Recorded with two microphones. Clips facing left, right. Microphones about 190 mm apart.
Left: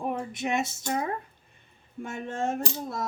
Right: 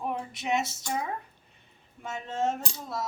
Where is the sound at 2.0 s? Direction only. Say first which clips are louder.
Even; 55° left (ahead or behind).